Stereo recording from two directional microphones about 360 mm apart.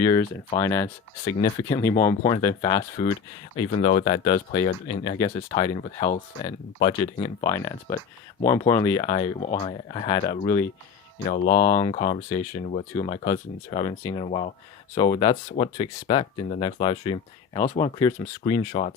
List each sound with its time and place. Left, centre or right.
0.0 s speech: centre